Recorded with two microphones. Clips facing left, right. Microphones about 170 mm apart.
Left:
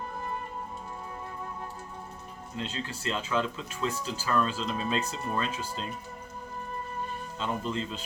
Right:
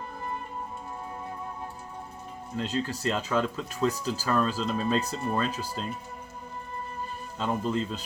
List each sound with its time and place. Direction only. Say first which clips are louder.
2.6 s speech: right 6 dB; 40° right (ahead or behind)
7.3 s speech: right 4 dB; 40° right (ahead or behind)